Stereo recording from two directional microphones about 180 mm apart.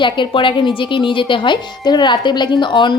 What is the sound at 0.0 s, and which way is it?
Speech, 25° left (ahead or behind).